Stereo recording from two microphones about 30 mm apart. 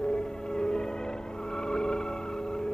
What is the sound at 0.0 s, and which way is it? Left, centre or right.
Music, left.